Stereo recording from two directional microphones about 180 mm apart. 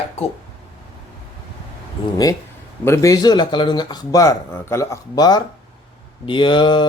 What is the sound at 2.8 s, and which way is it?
Speech, 15° left (ahead or behind).